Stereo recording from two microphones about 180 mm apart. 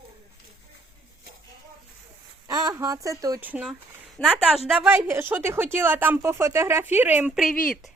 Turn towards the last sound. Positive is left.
turn(degrees=0)  # may be behind; listen again after turning